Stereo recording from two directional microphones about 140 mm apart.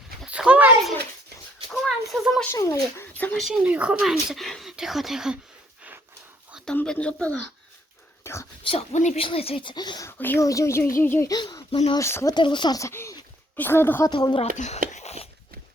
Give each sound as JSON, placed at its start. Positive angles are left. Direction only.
{"t": 0.3, "sound": "a sound", "side_deg": -10}
{"t": 2.6, "sound": "speech", "side_deg": 20}
{"t": 3.2, "sound": "speech", "side_deg": 10}
{"t": 3.4, "sound": "speech", "side_deg": -5}
{"t": 6.7, "sound": "speech", "side_deg": 5}
{"t": 8.2, "sound": "whispering", "side_deg": 20}
{"t": 8.6, "sound": "speech", "side_deg": 45}
{"t": 10.1, "sound": "speech", "side_deg": 15}
{"t": 12.3, "sound": "speech", "side_deg": 35}
{"t": 14.1, "sound": "speech", "side_deg": 30}
{"t": 14.5, "sound": "speech", "side_deg": 60}
{"t": 14.9, "sound": "a sound", "side_deg": 50}